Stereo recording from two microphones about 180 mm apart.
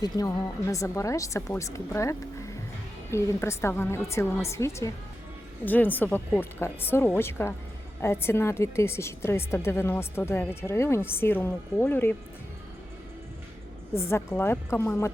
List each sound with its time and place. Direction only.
0.0 s a woman's voice: 20° left (ahead or behind)
13.9 s a woman's voice: 15° left (ahead or behind)